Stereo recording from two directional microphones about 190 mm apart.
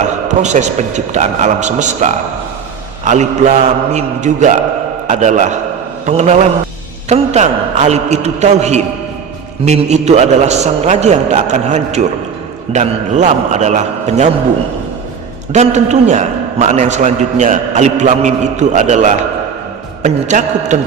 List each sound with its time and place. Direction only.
0.3 s a man's voice: 40° right (ahead or behind)
15.5 s a man's voice: 40° right (ahead or behind)